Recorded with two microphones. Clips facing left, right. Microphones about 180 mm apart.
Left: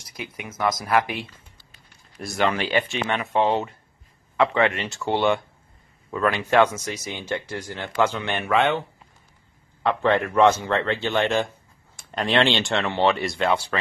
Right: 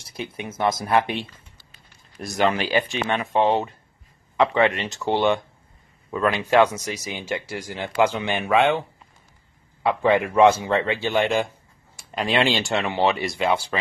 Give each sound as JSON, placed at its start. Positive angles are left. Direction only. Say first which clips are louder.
{"t": 0.0, "sound": "speech", "louder": "right 4 dB", "side_deg": -30}
{"t": 2.2, "sound": "speech", "louder": "right 2 dB", "side_deg": -15}
{"t": 9.8, "sound": "speech", "louder": "right 1 dB", "side_deg": -10}